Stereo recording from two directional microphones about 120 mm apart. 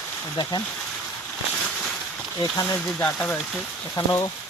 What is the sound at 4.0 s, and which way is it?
Speech, 30° left (ahead or behind).